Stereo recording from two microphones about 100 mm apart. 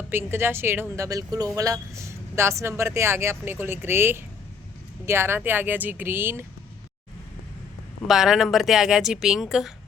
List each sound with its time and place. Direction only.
0.1 s speech: 25° right (ahead or behind)
8.0 s speech: 5° right (ahead or behind)